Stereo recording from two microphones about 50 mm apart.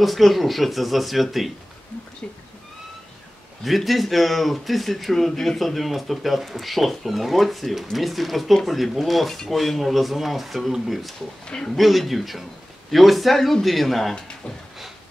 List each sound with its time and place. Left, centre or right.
0.0 s speech: centre
3.6 s speech: centre
11.4 s speech: centre
11.7 s speech: centre